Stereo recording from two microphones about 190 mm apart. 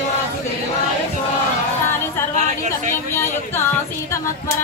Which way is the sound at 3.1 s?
15° left (ahead or behind).